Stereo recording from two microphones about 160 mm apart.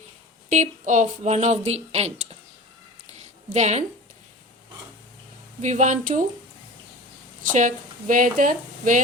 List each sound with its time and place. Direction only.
0.5 s speech: 50° right (ahead or behind)
3.1 s a sound: 45° right (ahead or behind)
5.6 s speech: 50° right (ahead or behind)
7.4 s speech: 50° right (ahead or behind)